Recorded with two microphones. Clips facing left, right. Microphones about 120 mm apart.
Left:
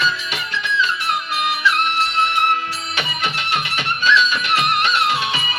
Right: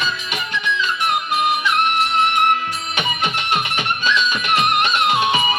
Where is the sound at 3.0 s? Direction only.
15° right (ahead or behind).